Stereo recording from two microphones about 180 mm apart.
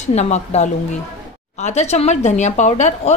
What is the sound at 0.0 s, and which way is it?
Speech, 40° left (ahead or behind).